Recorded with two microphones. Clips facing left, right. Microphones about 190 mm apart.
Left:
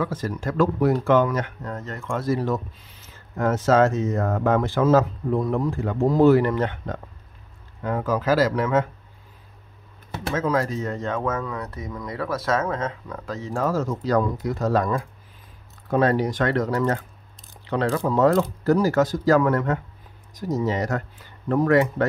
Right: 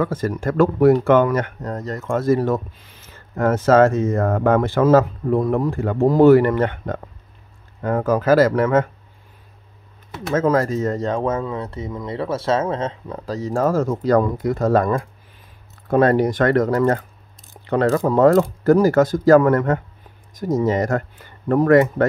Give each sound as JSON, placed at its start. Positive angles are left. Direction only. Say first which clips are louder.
{"t": 0.0, "sound": "speech", "louder": "right 5 dB", "side_deg": -50}
{"t": 1.7, "sound": "speech", "louder": "right 6 dB", "side_deg": -40}
{"t": 10.3, "sound": "speech", "louder": "right 6 dB", "side_deg": -45}
{"t": 13.5, "sound": "speech", "louder": "right 5 dB", "side_deg": -50}